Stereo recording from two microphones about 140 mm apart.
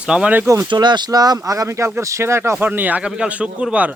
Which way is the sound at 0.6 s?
35° right (ahead or behind).